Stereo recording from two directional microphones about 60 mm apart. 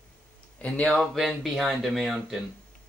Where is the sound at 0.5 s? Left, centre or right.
Left.